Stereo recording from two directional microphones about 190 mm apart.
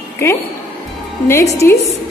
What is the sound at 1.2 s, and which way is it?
Speech, 15° left (ahead or behind).